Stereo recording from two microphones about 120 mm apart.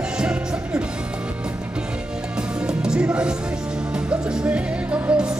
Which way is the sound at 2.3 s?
5° right (ahead or behind).